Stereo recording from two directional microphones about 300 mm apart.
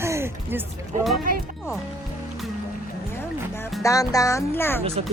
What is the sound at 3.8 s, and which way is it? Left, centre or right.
Speech, centre.